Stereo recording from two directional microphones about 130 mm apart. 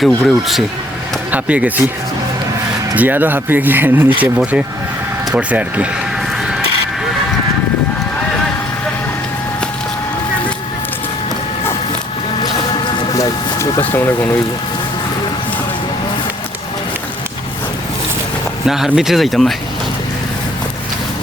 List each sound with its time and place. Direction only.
0.0 s speech: centre (ahead or behind)
1.3 s speech: 10° right (ahead or behind)
2.9 s speech: 15° right (ahead or behind)
13.1 s speech: 25° left (ahead or behind)
18.6 s speech: 5° right (ahead or behind)